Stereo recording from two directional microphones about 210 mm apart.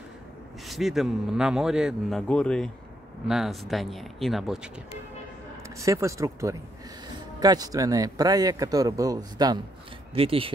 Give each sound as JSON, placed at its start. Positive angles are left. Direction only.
{"t": 0.7, "sound": "a man's voice", "side_deg": 0}
{"t": 5.6, "sound": "speech", "side_deg": -15}